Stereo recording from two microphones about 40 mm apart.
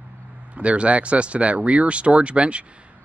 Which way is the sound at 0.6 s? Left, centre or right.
Right.